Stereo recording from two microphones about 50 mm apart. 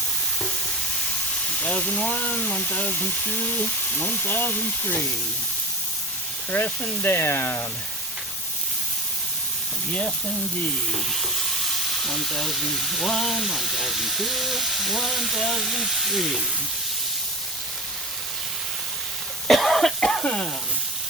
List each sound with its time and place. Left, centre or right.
1.6 s speech: left
6.5 s speech: left
7.0 s speech: left
10.9 s speech: centre
19.5 s cough: centre
20.2 s frying: centre